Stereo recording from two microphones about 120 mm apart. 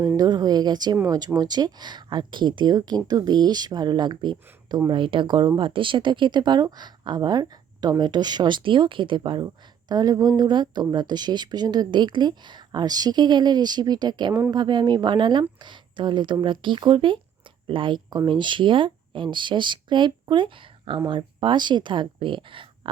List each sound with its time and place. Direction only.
0.2 s speech: 35° right (ahead or behind)